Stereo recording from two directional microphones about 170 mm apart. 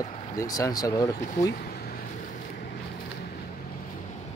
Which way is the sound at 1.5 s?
65° left (ahead or behind).